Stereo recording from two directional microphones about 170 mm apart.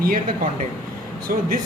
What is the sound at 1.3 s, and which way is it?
Speech, 55° right (ahead or behind).